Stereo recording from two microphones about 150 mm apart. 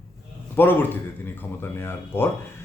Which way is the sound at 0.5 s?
15° left (ahead or behind).